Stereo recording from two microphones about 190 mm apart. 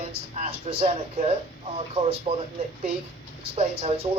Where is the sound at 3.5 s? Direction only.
30° right (ahead or behind).